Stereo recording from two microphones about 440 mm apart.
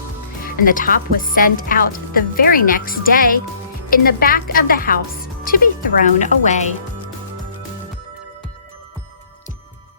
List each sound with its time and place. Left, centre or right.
0.4 s a woman's voice: centre